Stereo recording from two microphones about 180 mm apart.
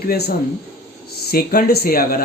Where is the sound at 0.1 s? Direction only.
60° left (ahead or behind).